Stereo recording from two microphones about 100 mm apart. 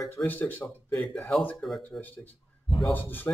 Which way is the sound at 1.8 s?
20° left (ahead or behind).